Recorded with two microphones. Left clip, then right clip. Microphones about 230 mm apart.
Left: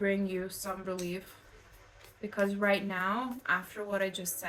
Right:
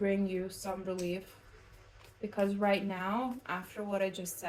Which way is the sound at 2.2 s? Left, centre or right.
Left.